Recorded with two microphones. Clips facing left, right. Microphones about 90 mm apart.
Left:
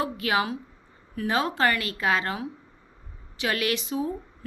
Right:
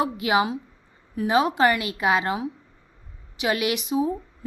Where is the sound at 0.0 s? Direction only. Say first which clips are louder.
Right 4 dB; 20° right (ahead or behind).